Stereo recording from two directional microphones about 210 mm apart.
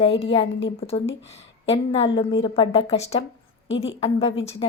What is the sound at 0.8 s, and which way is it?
A woman's voice, 30° left (ahead or behind).